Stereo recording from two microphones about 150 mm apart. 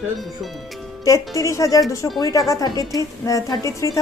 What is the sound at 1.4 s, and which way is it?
Speech, 20° left (ahead or behind).